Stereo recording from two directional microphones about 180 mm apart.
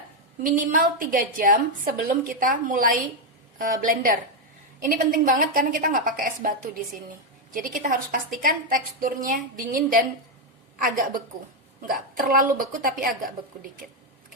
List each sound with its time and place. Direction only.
0.4 s a woman's voice: 50° right (ahead or behind)